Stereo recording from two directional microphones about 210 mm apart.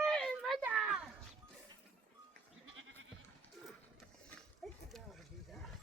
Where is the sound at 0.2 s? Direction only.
Centre (ahead or behind).